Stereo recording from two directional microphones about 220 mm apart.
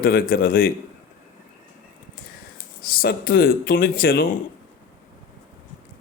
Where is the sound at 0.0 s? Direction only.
40° left (ahead or behind).